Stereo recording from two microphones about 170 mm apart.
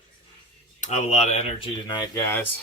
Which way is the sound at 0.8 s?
40° left (ahead or behind).